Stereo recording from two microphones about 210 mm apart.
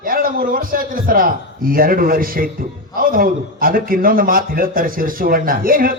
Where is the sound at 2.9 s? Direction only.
40° right (ahead or behind).